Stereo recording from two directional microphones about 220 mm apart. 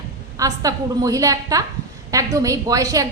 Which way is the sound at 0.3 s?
15° right (ahead or behind).